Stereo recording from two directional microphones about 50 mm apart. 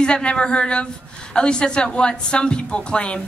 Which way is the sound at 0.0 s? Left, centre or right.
Left.